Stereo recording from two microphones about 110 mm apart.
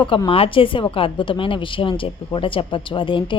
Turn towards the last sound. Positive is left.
turn(degrees=50)  # may be behind; listen again after turning